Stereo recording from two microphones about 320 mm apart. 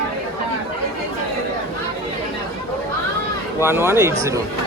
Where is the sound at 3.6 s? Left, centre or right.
Centre.